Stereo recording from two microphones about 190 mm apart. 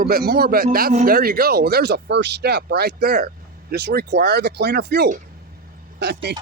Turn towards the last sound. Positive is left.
turn(degrees=-60)  # may be behind; listen again after turning